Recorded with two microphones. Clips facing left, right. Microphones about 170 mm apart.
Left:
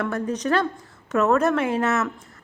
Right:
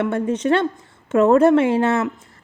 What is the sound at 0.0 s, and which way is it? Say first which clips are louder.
A woman's voice: right 5 dB; 25° right (ahead or behind).